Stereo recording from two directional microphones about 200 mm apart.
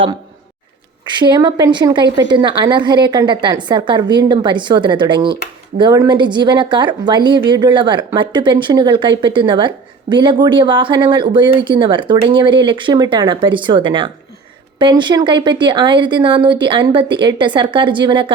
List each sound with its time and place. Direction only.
1.0 s speech: 20° right (ahead or behind)